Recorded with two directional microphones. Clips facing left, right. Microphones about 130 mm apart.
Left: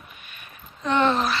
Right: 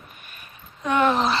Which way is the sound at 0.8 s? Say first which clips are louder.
Right 1 dB; 10° right (ahead or behind).